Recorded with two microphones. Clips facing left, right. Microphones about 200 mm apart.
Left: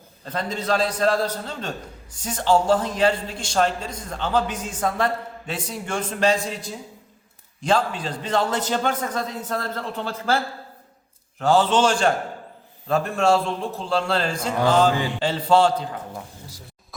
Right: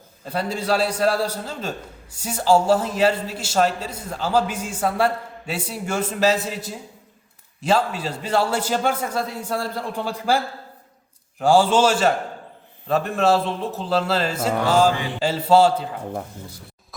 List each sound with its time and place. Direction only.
0.3 s a man's voice: 10° right (ahead or behind)